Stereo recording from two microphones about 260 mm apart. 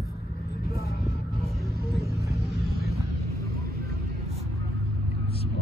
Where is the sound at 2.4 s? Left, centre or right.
Right.